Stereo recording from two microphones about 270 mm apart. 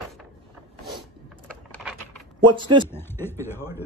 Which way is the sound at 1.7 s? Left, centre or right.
Centre.